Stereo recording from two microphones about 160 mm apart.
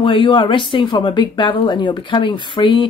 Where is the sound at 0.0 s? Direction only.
30° left (ahead or behind).